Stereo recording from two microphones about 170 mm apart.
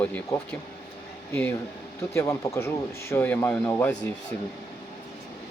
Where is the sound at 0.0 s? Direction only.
10° left (ahead or behind).